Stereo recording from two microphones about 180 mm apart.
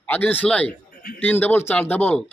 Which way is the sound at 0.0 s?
10° left (ahead or behind).